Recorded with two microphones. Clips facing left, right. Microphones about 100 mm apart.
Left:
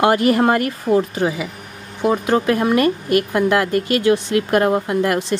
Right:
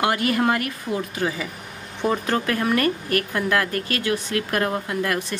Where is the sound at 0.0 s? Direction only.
25° left (ahead or behind).